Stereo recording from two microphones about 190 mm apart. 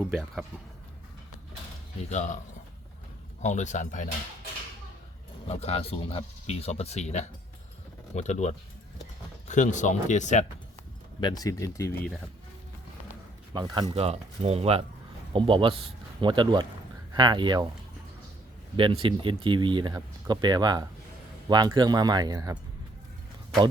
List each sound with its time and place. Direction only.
0.0 s speech: 5° right (ahead or behind)
2.0 s speech: 40° left (ahead or behind)
3.4 s speech: 40° left (ahead or behind)
5.5 s speech: 35° left (ahead or behind)
11.2 s speech: 20° left (ahead or behind)
13.5 s a man's voice: 25° right (ahead or behind)
18.8 s speech: 25° right (ahead or behind)